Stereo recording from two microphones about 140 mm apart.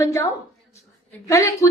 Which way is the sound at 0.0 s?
20° left (ahead or behind).